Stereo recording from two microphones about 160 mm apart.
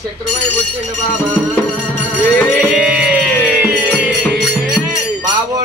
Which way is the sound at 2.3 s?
10° left (ahead or behind).